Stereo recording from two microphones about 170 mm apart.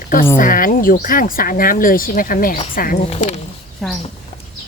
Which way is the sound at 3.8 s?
Centre (ahead or behind).